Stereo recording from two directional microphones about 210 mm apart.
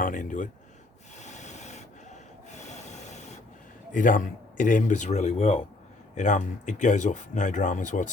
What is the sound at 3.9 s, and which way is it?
Speech, 40° left (ahead or behind).